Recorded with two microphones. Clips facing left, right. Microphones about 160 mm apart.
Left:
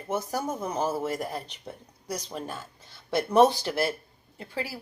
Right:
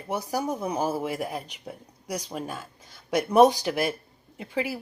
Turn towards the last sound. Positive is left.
turn(degrees=-20)  # may be behind; listen again after turning